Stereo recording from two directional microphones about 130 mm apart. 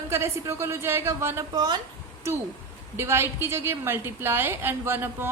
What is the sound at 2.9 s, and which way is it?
A woman's voice, 20° right (ahead or behind).